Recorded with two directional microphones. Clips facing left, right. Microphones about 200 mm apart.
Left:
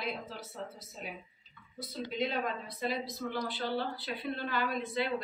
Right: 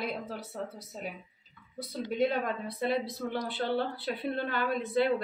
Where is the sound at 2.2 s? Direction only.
55° right (ahead or behind).